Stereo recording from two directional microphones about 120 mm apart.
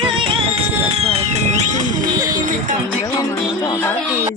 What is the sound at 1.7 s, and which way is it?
Music, 90° right.